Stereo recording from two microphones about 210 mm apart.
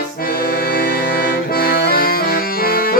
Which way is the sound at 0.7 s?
45° left (ahead or behind).